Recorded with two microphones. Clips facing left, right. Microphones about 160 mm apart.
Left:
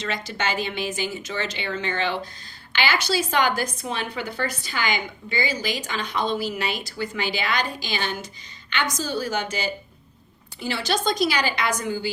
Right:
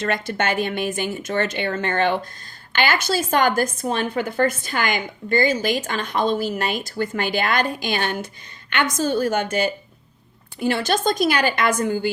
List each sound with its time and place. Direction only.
0.0 s a woman's voice: 55° right (ahead or behind)